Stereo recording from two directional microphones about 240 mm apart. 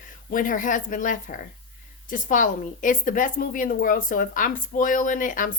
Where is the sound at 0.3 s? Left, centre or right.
Left.